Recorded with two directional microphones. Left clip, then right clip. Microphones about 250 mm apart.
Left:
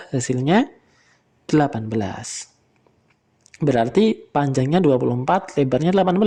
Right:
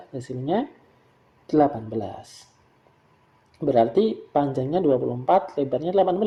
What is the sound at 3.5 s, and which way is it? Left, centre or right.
Speech, left.